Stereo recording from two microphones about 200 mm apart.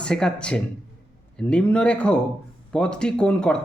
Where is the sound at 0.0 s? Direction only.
5° left (ahead or behind).